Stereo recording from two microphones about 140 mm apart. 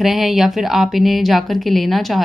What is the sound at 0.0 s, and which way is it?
A woman's voice, centre (ahead or behind).